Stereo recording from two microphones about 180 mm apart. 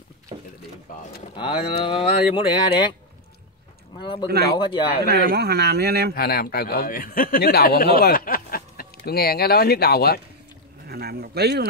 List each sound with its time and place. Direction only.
1.3 s speech: 25° left (ahead or behind)
4.0 s speech: 25° left (ahead or behind)
5.0 s speech: 60° right (ahead or behind)
6.1 s speech: 60° left (ahead or behind)
10.9 s speech: 60° right (ahead or behind)